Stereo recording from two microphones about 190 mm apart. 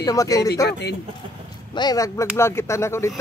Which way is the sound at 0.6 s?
60° left (ahead or behind).